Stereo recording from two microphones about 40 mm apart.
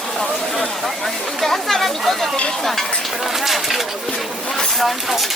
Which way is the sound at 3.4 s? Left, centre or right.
Centre.